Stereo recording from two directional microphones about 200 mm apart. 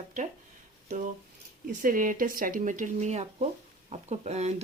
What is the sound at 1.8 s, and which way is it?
Speech, 40° right (ahead or behind).